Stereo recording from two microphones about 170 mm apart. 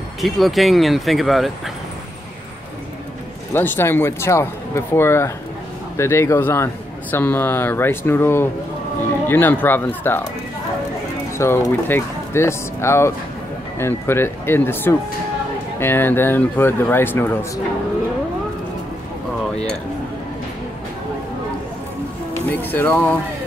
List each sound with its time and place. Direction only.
0.2 s speech: centre (ahead or behind)
3.5 s a man's voice: 15° left (ahead or behind)
11.3 s a man's voice: 15° left (ahead or behind)
22.3 s speech: 10° left (ahead or behind)